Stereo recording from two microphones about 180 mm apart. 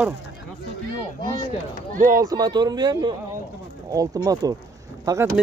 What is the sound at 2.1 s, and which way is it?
Speech, 20° right (ahead or behind).